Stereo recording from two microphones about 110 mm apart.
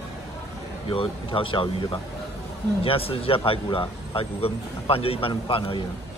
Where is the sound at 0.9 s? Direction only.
55° left (ahead or behind).